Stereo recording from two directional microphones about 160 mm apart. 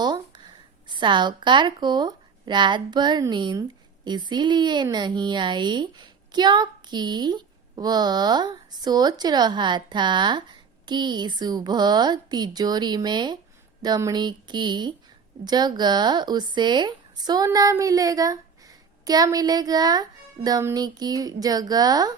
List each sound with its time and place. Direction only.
0.0 s a woman's voice: 25° right (ahead or behind)